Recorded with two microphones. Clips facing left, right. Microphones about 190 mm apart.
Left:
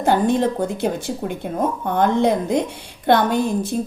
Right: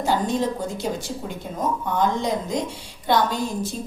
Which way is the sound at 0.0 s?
60° left (ahead or behind).